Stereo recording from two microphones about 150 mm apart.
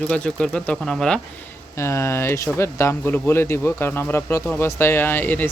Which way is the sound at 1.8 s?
20° left (ahead or behind).